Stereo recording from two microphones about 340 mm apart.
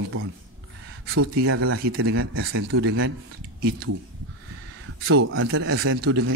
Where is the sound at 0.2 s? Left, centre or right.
Right.